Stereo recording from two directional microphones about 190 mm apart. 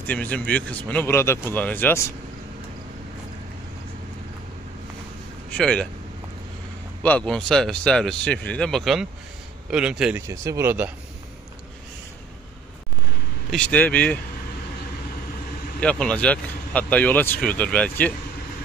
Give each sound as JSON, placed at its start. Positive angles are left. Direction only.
{"t": 0.0, "sound": "speech", "side_deg": 10}
{"t": 5.5, "sound": "speech", "side_deg": 5}
{"t": 7.0, "sound": "speech", "side_deg": 10}
{"t": 10.2, "sound": "speech", "side_deg": -15}
{"t": 13.5, "sound": "speech", "side_deg": 5}
{"t": 15.8, "sound": "speech", "side_deg": 5}